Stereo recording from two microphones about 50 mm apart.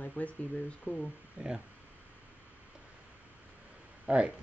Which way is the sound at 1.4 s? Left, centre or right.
Right.